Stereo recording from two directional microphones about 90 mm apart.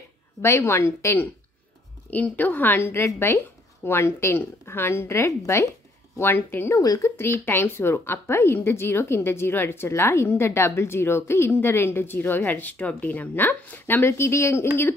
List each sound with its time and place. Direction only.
0.4 s a woman's voice: 30° left (ahead or behind)
2.0 s speech: 20° left (ahead or behind)
6.8 s a woman's voice: 40° left (ahead or behind)
7.2 s speech: 25° left (ahead or behind)